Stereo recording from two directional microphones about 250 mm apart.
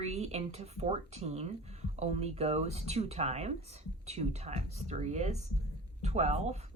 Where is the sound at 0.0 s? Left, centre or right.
Right.